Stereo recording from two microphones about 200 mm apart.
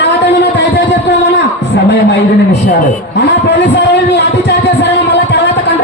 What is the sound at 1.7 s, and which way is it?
A man's voice, 60° left (ahead or behind).